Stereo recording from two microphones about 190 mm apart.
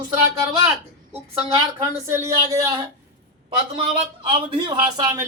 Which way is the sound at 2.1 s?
15° right (ahead or behind).